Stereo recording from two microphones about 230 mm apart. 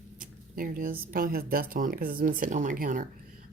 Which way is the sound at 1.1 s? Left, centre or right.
Right.